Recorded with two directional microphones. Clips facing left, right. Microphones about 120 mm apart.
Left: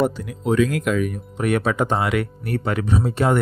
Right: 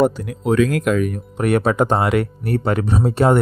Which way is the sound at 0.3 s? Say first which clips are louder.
Right 2 dB; 60° right (ahead or behind).